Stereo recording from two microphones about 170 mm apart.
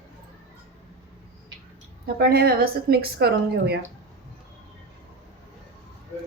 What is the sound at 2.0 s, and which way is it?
A woman's voice, 65° right (ahead or behind).